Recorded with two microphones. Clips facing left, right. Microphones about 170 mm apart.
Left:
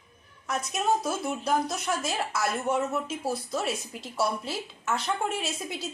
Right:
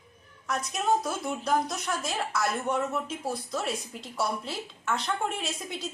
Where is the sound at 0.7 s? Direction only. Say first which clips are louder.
Left 1 dB; centre (ahead or behind).